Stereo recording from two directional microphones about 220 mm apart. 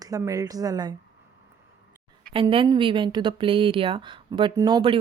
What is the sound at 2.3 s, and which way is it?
Speech, 25° right (ahead or behind).